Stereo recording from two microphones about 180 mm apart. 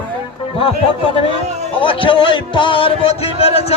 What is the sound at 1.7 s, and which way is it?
A man's voice, 30° left (ahead or behind).